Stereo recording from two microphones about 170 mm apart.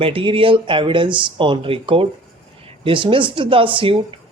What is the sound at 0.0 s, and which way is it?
Speech, 30° right (ahead or behind).